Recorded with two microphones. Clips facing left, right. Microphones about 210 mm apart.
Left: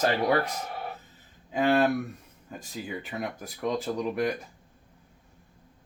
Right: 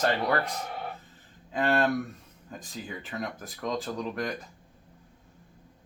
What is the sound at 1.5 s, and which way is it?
Speech, 10° left (ahead or behind).